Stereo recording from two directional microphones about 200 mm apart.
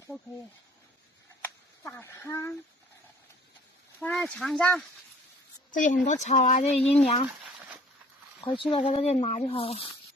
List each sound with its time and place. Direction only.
1.4 s a sound: 10° left (ahead or behind)
4.0 s speech: 5° left (ahead or behind)
5.7 s speech: 40° left (ahead or behind)
8.4 s speech: 25° left (ahead or behind)